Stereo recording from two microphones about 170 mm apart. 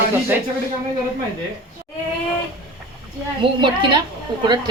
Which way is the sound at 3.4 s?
25° right (ahead or behind).